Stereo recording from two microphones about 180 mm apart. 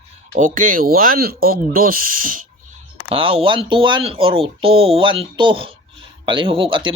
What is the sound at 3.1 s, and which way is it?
Speech, 30° right (ahead or behind).